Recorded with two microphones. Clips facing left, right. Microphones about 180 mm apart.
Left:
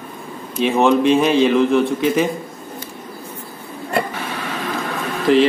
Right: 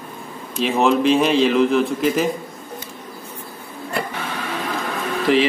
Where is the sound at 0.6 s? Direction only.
Centre (ahead or behind).